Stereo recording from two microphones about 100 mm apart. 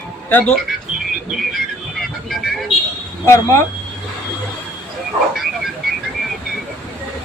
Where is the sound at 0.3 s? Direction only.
20° left (ahead or behind).